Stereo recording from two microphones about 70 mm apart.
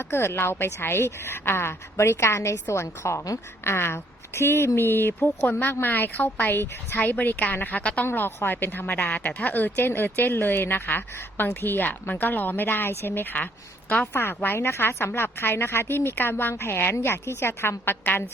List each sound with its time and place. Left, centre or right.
0.0 s a woman's voice: left